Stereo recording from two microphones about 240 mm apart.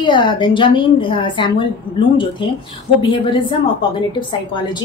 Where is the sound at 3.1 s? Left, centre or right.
Left.